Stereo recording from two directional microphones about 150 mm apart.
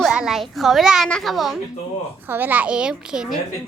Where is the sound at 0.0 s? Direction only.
5° right (ahead or behind).